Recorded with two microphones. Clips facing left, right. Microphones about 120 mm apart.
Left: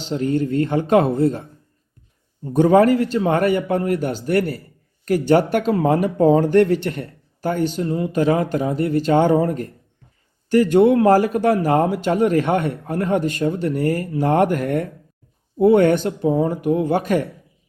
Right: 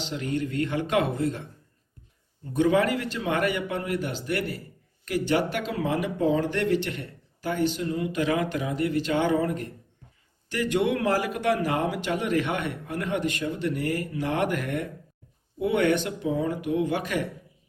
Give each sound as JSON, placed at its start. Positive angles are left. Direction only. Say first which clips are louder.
{"t": 0.0, "sound": "a man's voice", "louder": "left 8 dB", "side_deg": 35}